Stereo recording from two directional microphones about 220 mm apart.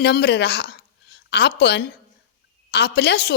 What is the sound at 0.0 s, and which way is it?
A woman's voice, 50° left (ahead or behind).